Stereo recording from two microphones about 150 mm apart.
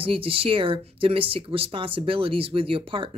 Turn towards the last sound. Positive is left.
turn(degrees=-35)  # may be behind; listen again after turning